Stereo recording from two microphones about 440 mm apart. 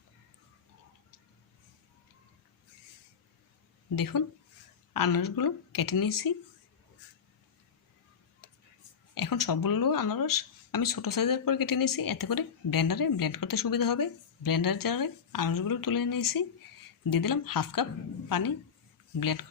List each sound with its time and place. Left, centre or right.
3.9 s speech: left
9.1 s speech: left